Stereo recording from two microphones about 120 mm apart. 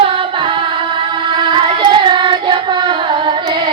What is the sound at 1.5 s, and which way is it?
Singing, 40° right (ahead or behind).